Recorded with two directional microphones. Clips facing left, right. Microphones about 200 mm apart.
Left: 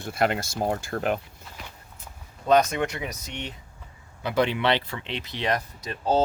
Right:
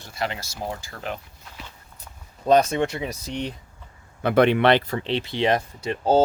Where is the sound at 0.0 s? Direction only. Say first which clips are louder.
Left 5 dB; 55° left (ahead or behind).